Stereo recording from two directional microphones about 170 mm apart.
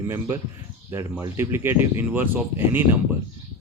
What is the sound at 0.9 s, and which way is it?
A man's voice, 15° right (ahead or behind).